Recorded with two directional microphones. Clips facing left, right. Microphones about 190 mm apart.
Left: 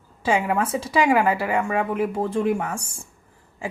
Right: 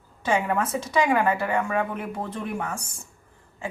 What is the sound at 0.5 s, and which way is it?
Speech, 30° left (ahead or behind).